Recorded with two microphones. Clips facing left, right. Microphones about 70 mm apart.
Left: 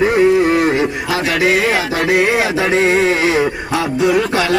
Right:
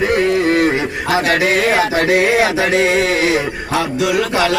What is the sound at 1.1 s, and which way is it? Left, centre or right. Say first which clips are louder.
Speech: right 1 dB; right.